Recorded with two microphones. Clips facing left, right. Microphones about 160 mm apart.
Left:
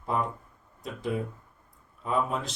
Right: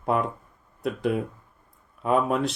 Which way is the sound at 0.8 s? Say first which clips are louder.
Right 6 dB; 65° right (ahead or behind).